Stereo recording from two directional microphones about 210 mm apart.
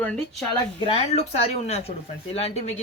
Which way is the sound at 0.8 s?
30° left (ahead or behind).